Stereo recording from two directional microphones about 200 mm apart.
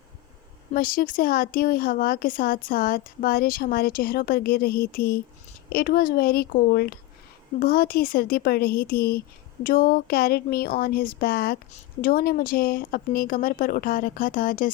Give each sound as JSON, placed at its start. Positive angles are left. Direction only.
{"t": 0.7, "sound": "a woman's voice", "side_deg": 45}